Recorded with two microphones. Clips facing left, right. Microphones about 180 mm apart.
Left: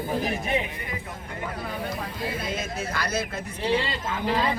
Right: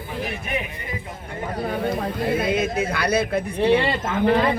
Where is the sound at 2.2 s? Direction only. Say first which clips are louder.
Right 10 dB; 60° right (ahead or behind).